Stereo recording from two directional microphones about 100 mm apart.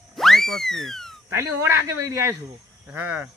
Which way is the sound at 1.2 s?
25° right (ahead or behind).